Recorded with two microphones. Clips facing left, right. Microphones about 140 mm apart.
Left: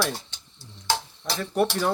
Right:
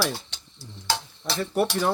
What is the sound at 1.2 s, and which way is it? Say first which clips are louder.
Speech: even; 5° right (ahead or behind).